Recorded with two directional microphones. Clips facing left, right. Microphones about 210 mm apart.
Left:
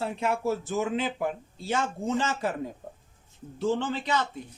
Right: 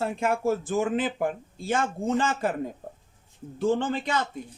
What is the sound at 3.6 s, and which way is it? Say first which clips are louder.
Speech: right 3 dB; 50° right (ahead or behind).